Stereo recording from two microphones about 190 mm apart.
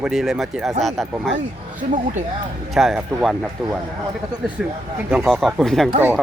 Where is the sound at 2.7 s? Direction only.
Centre (ahead or behind).